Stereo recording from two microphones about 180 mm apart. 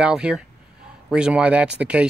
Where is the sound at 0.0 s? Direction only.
5° right (ahead or behind).